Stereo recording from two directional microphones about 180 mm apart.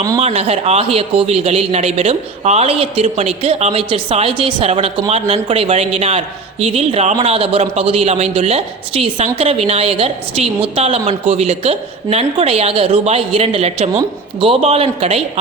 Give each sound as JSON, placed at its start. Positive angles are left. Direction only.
{"t": 0.2, "sound": "a man's voice", "side_deg": -35}